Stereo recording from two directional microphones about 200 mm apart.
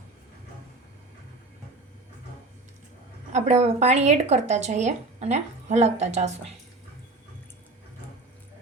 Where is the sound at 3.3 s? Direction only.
35° right (ahead or behind).